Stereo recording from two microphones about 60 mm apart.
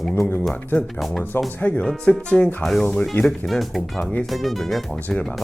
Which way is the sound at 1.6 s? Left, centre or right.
Left.